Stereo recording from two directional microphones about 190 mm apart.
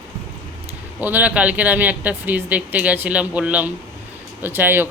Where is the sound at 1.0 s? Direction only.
10° right (ahead or behind).